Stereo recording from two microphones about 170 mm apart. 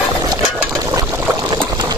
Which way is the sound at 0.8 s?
20° right (ahead or behind).